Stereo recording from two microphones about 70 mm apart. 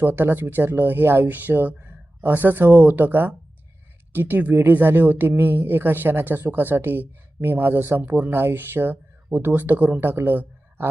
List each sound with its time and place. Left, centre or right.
0.0 s speech: right